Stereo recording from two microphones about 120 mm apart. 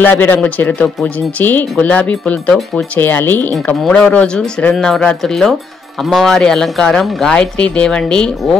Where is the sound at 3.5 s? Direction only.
5° left (ahead or behind).